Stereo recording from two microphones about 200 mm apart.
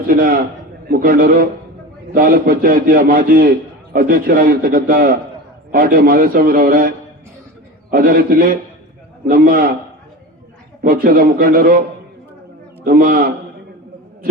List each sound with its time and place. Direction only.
0.1 s a man's voice: 45° right (ahead or behind)
11.0 s a man's voice: 45° right (ahead or behind)
12.8 s a man's voice: 45° right (ahead or behind)